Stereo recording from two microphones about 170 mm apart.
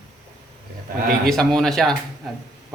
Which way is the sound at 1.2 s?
Centre (ahead or behind).